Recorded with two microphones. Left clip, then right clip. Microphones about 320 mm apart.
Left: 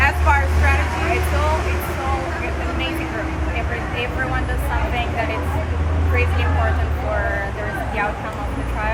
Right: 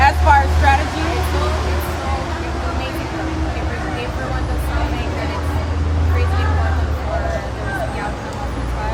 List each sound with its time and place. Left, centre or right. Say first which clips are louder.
0.0 s vehicle: right 5 dB; right